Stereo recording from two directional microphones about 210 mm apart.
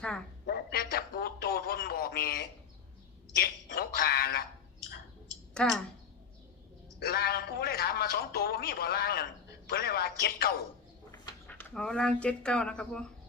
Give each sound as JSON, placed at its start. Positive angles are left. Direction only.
{"t": 0.4, "sound": "a sound", "side_deg": 45}
{"t": 3.3, "sound": "a woman's voice", "side_deg": 45}
{"t": 5.5, "sound": "speech", "side_deg": 0}
{"t": 7.0, "sound": "a man's voice", "side_deg": 45}
{"t": 11.4, "sound": "speech", "side_deg": 5}